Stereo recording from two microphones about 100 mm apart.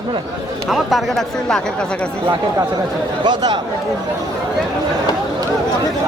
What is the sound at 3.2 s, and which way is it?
Speech, 45° right (ahead or behind).